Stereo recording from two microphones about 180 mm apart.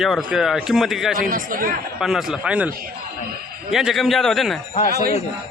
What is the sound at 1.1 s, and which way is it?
Speech, 50° right (ahead or behind).